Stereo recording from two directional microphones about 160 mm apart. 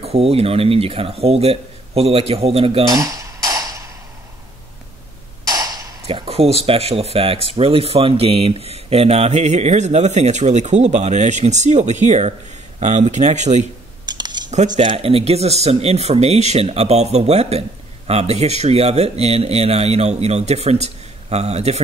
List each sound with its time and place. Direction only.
0.0 s speech: 40° right (ahead or behind)
3.0 s a sound: 20° right (ahead or behind)
5.5 s a sound: 25° right (ahead or behind)
6.0 s speech: 35° right (ahead or behind)
14.0 s cutlery: 25° right (ahead or behind)
14.7 s speech: 30° right (ahead or behind)